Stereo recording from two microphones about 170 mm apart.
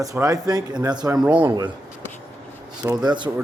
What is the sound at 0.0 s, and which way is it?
Speech, 20° right (ahead or behind).